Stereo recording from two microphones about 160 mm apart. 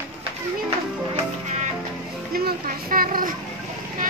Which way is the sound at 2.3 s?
65° right (ahead or behind).